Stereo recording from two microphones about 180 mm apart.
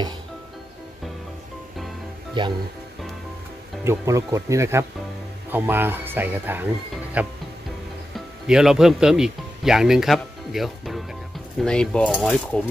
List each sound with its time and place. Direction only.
2.4 s speech: 25° right (ahead or behind)
3.8 s speech: 15° right (ahead or behind)
8.5 s speech: 5° right (ahead or behind)